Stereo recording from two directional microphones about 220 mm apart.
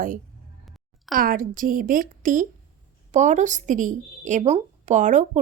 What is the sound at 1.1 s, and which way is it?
A woman's voice, 40° right (ahead or behind).